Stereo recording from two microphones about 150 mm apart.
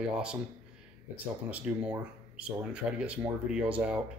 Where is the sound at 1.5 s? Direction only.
10° right (ahead or behind).